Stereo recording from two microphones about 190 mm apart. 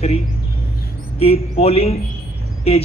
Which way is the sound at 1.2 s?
30° left (ahead or behind).